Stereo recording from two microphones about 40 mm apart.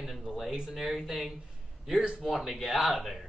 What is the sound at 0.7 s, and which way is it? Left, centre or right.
Speech, centre.